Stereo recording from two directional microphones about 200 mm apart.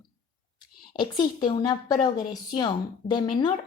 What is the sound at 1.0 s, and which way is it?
A woman's voice, 20° left (ahead or behind).